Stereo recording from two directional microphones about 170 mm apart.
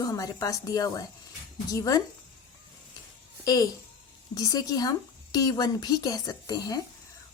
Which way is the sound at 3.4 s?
20° left (ahead or behind).